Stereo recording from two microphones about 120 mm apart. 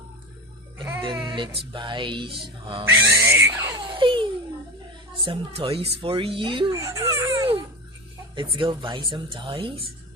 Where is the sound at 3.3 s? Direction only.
20° right (ahead or behind).